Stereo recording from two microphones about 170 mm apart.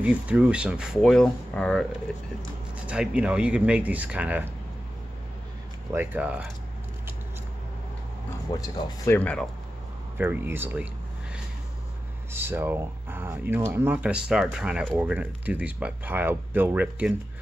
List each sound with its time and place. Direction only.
0.0 s speech: 5° right (ahead or behind)
5.9 s speech: 10° right (ahead or behind)
8.5 s speech: 25° left (ahead or behind)
9.1 s speech: 10° left (ahead or behind)
10.1 s speech: 10° right (ahead or behind)
12.3 s speech: 15° right (ahead or behind)